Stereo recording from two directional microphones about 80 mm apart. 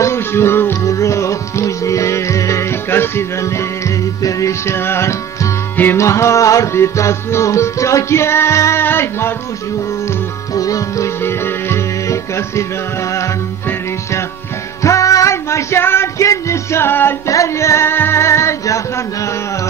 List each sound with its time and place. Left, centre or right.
0.0 s music: left
10.5 s music: left
11.2 s music: left
14.8 s music: left
17.3 s music: left